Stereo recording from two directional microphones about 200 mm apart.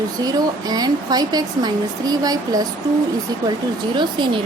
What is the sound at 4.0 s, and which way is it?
Speech, 25° right (ahead or behind).